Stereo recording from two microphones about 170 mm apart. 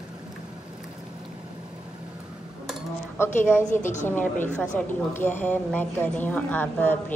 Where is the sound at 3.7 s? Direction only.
45° left (ahead or behind).